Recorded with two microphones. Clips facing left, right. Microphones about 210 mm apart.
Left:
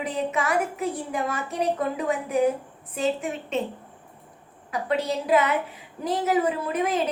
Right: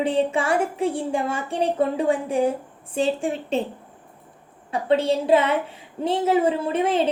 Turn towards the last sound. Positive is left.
turn(degrees=-30)  # may be behind; listen again after turning